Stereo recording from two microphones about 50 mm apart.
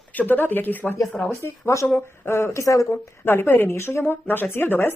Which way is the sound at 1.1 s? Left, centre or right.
Centre.